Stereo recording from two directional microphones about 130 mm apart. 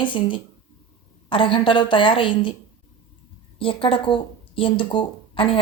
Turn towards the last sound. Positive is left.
turn(degrees=45)  # may be behind; listen again after turning